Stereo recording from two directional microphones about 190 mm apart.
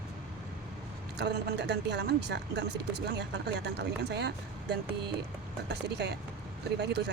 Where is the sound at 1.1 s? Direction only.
60° right (ahead or behind).